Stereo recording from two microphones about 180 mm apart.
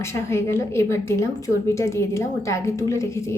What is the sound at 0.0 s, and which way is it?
A woman's voice, 15° left (ahead or behind).